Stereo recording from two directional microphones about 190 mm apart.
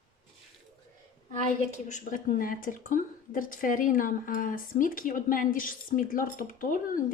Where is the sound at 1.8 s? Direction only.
40° left (ahead or behind).